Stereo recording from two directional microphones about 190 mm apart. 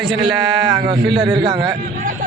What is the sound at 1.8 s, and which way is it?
Speech, 45° right (ahead or behind).